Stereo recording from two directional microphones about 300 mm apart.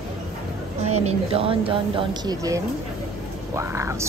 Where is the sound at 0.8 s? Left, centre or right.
Right.